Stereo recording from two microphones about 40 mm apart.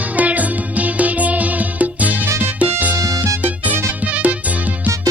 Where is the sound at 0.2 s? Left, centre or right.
Right.